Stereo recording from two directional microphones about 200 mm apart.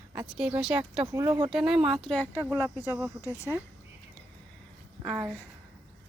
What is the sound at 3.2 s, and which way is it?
Speech, 15° left (ahead or behind).